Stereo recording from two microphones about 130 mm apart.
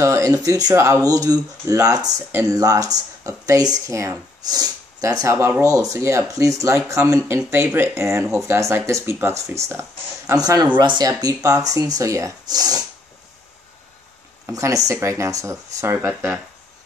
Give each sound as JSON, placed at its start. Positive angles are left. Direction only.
{"t": 0.0, "sound": "speech", "side_deg": -25}
{"t": 14.4, "sound": "speech", "side_deg": -25}